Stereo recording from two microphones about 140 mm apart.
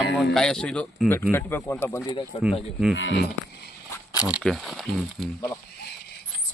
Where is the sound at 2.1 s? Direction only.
40° left (ahead or behind).